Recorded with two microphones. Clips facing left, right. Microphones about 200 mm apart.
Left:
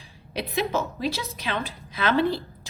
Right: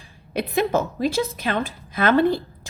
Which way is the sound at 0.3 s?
50° right (ahead or behind).